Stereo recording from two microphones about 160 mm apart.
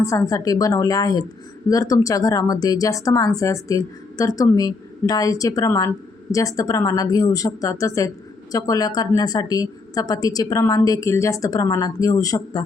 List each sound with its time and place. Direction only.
0.0 s speech: 20° left (ahead or behind)